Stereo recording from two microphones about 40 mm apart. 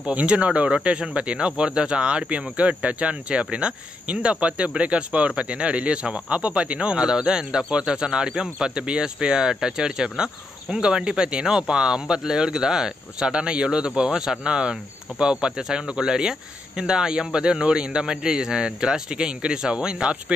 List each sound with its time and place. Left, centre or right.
0.0 s speech: right
7.0 s speech: centre